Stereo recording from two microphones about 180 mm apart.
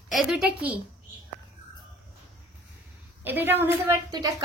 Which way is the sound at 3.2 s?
10° right (ahead or behind).